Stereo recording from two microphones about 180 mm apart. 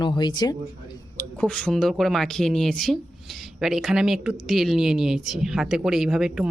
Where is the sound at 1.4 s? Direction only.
5° left (ahead or behind).